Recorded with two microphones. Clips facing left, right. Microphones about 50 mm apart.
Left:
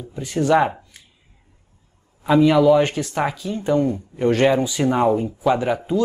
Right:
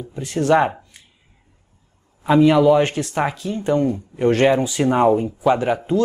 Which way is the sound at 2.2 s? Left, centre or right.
Centre.